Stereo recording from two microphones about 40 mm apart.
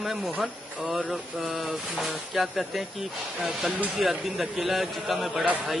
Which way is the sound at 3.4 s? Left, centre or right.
Centre.